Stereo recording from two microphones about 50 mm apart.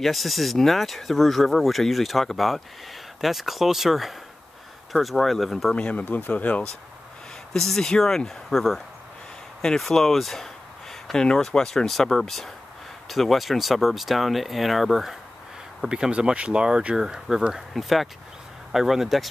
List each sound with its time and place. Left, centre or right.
0.0 s speech: centre
5.8 s speech: left
6.0 s speech: left
7.5 s speech: centre
9.6 s a sound: centre
11.2 s speech: centre